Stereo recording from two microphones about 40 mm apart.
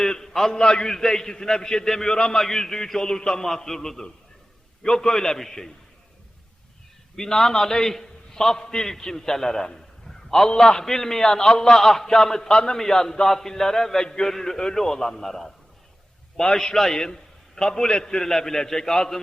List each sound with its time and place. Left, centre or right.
0.0 s a man's voice: centre
7.2 s a man's voice: centre